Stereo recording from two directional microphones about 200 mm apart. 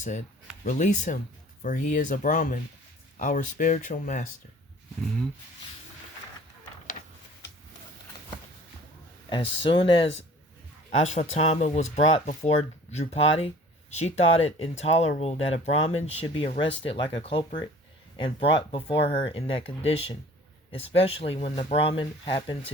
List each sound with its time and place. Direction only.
0.6 s speech: 40° left (ahead or behind)
9.6 s speech: 25° left (ahead or behind)